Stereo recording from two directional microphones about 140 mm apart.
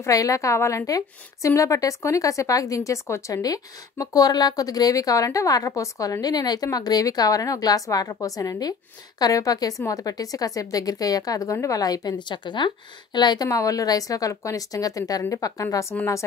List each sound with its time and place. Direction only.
0.0 s a woman's voice: 25° left (ahead or behind)